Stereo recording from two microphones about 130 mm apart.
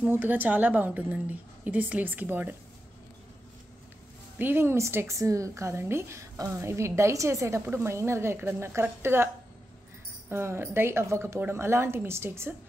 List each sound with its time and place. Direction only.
0.0 s a woman's voice: 15° right (ahead or behind)
4.4 s a woman's voice: 15° right (ahead or behind)
10.3 s a woman's voice: 20° right (ahead or behind)